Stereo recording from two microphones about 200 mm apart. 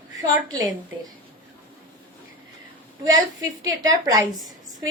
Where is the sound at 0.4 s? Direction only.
20° right (ahead or behind).